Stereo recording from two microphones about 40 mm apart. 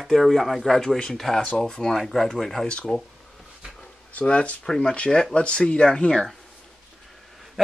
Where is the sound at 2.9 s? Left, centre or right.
Centre.